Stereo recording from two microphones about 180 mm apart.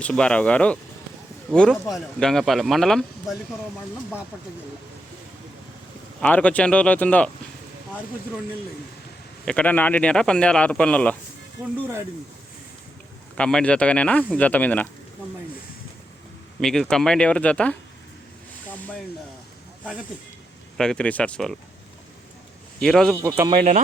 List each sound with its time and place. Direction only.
0.0 s speech: 5° left (ahead or behind)
6.1 s speech: 5° left (ahead or behind)
9.5 s speech: 5° left (ahead or behind)
11.6 s speech: 20° right (ahead or behind)
13.3 s speech: 5° left (ahead or behind)
16.6 s speech: centre (ahead or behind)
20.7 s speech: 5° left (ahead or behind)
22.8 s speech: 5° left (ahead or behind)
23.1 s speech: 10° right (ahead or behind)
23.5 s speech: 35° right (ahead or behind)